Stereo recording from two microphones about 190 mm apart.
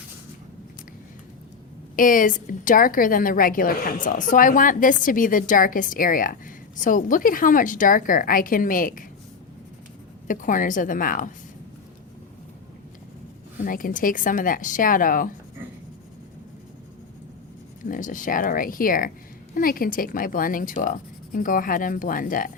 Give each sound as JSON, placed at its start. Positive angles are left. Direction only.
{"t": 2.0, "sound": "a woman's voice", "side_deg": 45}
{"t": 10.2, "sound": "a woman's voice", "side_deg": 45}
{"t": 13.7, "sound": "a woman's voice", "side_deg": 45}
{"t": 17.8, "sound": "a woman's voice", "side_deg": 45}